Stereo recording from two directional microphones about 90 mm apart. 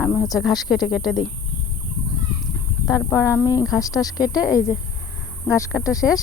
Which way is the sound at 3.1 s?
35° left (ahead or behind).